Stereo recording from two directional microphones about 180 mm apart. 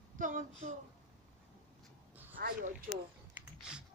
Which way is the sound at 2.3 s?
55° right (ahead or behind).